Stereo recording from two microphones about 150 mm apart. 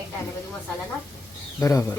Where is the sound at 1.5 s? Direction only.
20° left (ahead or behind).